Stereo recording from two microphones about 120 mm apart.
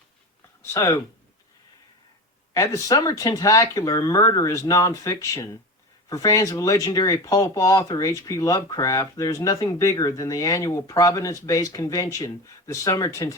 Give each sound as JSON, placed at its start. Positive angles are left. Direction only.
{"t": 0.6, "sound": "speech", "side_deg": 25}
{"t": 2.5, "sound": "speech", "side_deg": 25}